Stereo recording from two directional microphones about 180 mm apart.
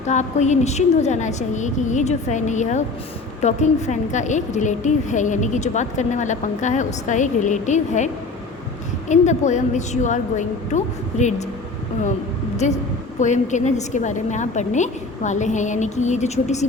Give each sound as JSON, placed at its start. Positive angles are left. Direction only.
{"t": 0.1, "sound": "a woman's voice", "side_deg": 40}
{"t": 12.6, "sound": "a woman's voice", "side_deg": 40}